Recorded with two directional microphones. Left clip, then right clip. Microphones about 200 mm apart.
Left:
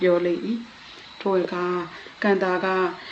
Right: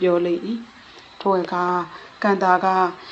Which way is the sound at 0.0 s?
10° right (ahead or behind).